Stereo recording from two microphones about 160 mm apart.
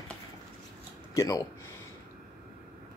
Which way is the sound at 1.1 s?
20° left (ahead or behind).